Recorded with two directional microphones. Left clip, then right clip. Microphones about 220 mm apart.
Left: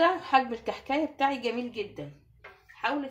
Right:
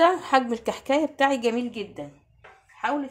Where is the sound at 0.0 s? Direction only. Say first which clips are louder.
Right 4 dB; 50° right (ahead or behind).